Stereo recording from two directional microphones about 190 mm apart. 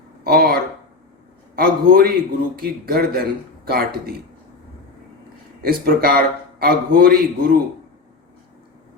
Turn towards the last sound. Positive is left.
turn(degrees=-50)  # may be behind; listen again after turning